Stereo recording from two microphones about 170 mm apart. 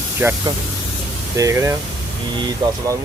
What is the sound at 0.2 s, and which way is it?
Speech, 10° right (ahead or behind).